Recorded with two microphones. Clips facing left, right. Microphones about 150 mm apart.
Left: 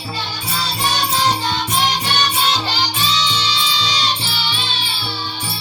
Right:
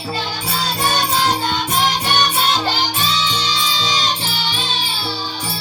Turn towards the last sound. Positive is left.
turn(degrees=-40)  # may be behind; listen again after turning